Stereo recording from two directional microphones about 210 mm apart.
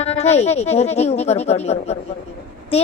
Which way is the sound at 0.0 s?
30° left (ahead or behind).